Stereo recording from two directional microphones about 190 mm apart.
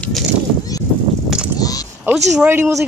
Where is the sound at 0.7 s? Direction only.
20° left (ahead or behind).